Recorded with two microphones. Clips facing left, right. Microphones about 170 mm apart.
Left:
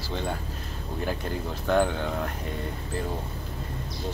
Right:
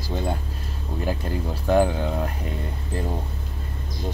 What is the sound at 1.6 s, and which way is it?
Speech, 10° right (ahead or behind).